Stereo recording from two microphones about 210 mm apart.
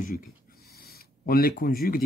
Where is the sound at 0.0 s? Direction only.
45° left (ahead or behind).